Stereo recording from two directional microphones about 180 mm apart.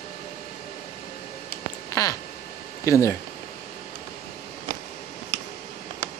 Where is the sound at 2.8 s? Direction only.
15° left (ahead or behind).